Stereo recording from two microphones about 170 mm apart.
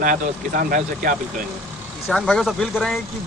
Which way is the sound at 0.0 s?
55° right (ahead or behind).